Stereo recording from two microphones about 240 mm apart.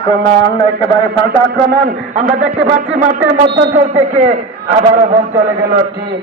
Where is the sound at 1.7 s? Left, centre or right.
Right.